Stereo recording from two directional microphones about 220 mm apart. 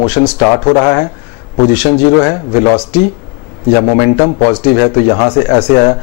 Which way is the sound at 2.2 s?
20° left (ahead or behind).